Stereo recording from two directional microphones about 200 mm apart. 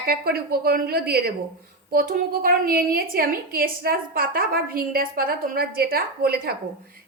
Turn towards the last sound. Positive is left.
turn(degrees=-50)  # may be behind; listen again after turning